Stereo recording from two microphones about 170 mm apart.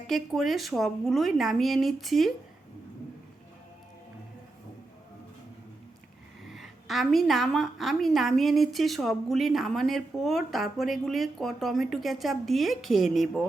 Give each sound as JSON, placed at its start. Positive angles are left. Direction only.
{"t": 0.1, "sound": "a woman's voice", "side_deg": 0}
{"t": 6.5, "sound": "a woman's voice", "side_deg": 0}